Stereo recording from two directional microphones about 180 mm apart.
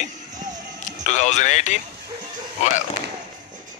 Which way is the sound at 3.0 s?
45° right (ahead or behind).